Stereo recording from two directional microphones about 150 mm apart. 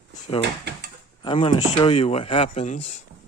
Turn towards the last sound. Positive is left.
turn(degrees=50)  # may be behind; listen again after turning